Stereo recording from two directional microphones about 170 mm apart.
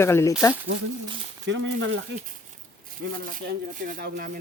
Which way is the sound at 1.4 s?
90° right.